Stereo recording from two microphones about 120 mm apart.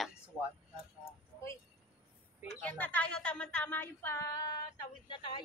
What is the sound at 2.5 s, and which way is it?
A woman's voice, 10° left (ahead or behind).